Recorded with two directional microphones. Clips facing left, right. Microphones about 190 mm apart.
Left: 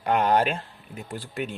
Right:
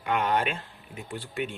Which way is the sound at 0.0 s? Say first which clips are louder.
Left 5 dB; 40° left (ahead or behind).